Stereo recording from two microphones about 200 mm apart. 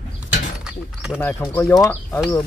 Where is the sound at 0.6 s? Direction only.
5° right (ahead or behind).